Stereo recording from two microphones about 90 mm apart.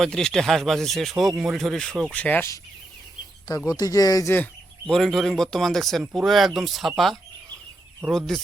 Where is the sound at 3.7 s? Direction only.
45° left (ahead or behind).